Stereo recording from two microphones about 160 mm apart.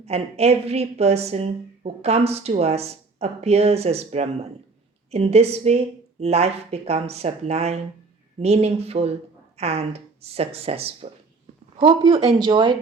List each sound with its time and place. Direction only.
0.0 s a woman's voice: 40° right (ahead or behind)